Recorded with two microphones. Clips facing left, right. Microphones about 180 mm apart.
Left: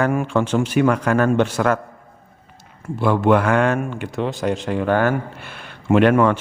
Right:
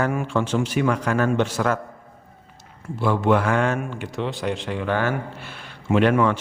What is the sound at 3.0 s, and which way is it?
Speech, 60° left (ahead or behind).